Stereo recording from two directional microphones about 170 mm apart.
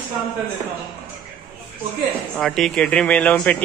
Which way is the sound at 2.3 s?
5° left (ahead or behind).